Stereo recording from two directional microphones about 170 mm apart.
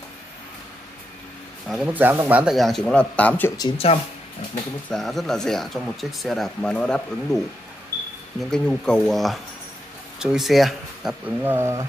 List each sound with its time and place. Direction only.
1.7 s speech: 5° right (ahead or behind); by 3.5 s 10° left (ahead or behind)
3.5 s speech: 30° left (ahead or behind)
4.8 s speech: centre (ahead or behind)
8.4 s speech: 5° left (ahead or behind); by 11.8 s 15° right (ahead or behind)